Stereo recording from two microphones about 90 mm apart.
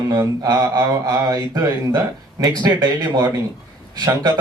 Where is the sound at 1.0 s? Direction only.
40° right (ahead or behind).